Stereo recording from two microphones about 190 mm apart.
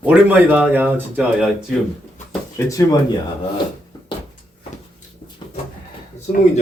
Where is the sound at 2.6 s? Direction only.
15° left (ahead or behind).